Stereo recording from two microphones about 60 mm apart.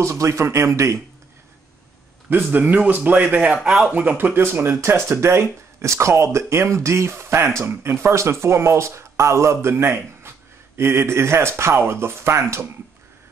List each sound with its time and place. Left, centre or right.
0.0 s speech: right
2.2 s a man's voice: right
3.6 s speech: centre
3.9 s speech: right